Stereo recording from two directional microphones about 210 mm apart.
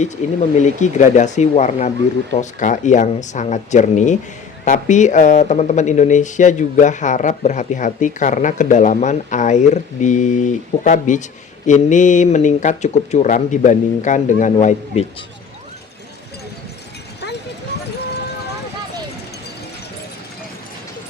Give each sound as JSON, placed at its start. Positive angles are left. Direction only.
{"t": 0.5, "sound": "speech", "side_deg": 35}